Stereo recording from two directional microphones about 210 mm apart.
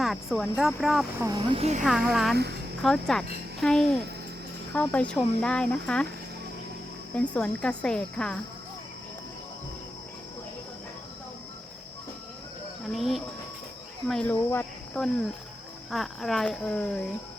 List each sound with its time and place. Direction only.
0.0 s speech: centre (ahead or behind)
1.2 s speech: 20° right (ahead or behind)
1.8 s speech: centre (ahead or behind)
2.3 s speech: 50° right (ahead or behind)
2.8 s speech: centre (ahead or behind)
7.1 s speech: 5° left (ahead or behind)
12.8 s speech: centre (ahead or behind)